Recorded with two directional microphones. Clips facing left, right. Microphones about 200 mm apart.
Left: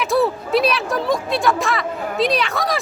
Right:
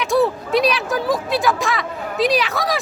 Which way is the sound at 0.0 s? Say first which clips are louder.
Right 1 dB; centre (ahead or behind).